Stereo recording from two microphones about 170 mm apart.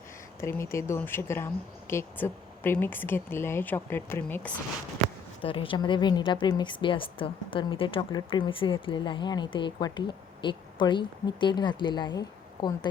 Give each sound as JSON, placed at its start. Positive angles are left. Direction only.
{"t": 0.4, "sound": "speech", "side_deg": 15}
{"t": 5.4, "sound": "speech", "side_deg": 30}